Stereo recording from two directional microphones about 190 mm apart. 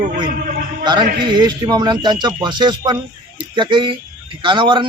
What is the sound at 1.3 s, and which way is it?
Speech, 25° right (ahead or behind).